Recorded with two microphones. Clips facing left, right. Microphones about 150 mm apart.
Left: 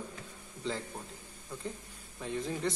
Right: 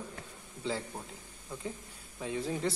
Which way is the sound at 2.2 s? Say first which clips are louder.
Right 1 dB; 5° right (ahead or behind).